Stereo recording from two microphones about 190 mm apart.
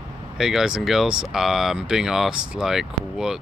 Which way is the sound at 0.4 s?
Centre (ahead or behind).